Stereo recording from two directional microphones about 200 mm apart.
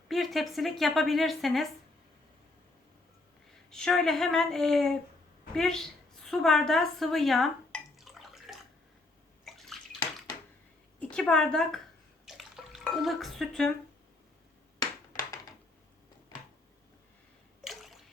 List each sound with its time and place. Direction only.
0.1 s a woman's voice: centre (ahead or behind)
3.5 s a woman's voice: 5° left (ahead or behind)
5.5 s a sound: centre (ahead or behind)
9.4 s bathtub: centre (ahead or behind)
11.0 s speech: 5° left (ahead or behind)
12.2 s bathtub: centre (ahead or behind)
15.1 s a sound: 20° left (ahead or behind)
17.6 s water: centre (ahead or behind)